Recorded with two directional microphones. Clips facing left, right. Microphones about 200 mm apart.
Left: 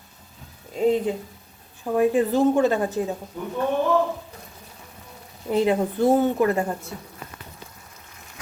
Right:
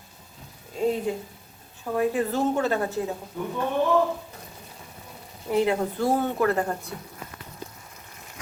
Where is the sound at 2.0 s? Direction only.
15° left (ahead or behind).